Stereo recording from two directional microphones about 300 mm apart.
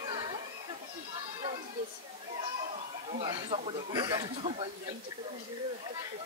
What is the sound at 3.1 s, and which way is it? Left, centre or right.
Speech, centre.